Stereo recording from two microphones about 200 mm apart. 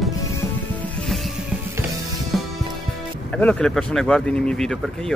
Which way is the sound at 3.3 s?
5° left (ahead or behind).